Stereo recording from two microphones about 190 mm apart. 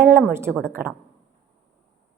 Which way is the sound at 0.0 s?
15° right (ahead or behind).